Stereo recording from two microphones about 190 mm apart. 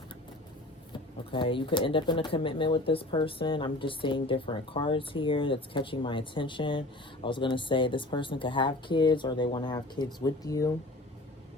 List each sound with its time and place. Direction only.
1.3 s speech: 25° left (ahead or behind)